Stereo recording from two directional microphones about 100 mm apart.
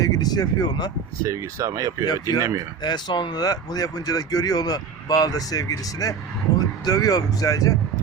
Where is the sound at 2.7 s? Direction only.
45° left (ahead or behind).